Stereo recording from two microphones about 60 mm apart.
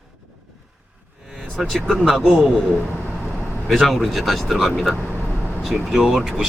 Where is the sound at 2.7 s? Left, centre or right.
Right.